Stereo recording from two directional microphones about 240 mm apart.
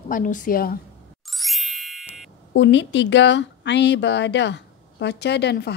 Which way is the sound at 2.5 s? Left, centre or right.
Left.